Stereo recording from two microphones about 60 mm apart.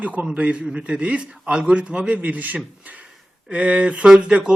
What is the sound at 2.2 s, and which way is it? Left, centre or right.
A man's voice, right.